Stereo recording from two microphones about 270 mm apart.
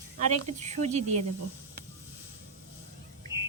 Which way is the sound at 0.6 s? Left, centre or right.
Right.